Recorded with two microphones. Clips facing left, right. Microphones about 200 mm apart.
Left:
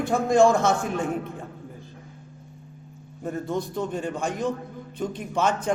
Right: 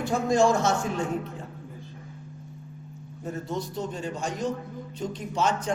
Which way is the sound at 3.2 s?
55° left (ahead or behind).